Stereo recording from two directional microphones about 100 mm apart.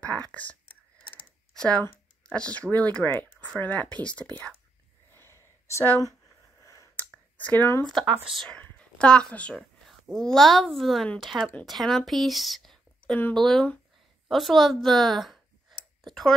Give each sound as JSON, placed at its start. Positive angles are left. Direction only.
{"t": 0.3, "sound": "speech", "side_deg": 15}
{"t": 1.5, "sound": "a sound", "side_deg": 5}
{"t": 2.2, "sound": "speech", "side_deg": 10}
{"t": 5.7, "sound": "speech", "side_deg": 30}
{"t": 6.6, "sound": "a sound", "side_deg": 30}
{"t": 7.3, "sound": "speech", "side_deg": 15}
{"t": 7.9, "sound": "a woman's voice", "side_deg": -5}
{"t": 8.5, "sound": "a woman's voice", "side_deg": 15}